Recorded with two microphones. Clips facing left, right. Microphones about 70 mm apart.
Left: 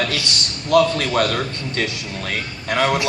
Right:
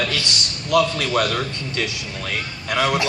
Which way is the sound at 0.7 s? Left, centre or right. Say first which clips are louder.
Left 3 dB; left.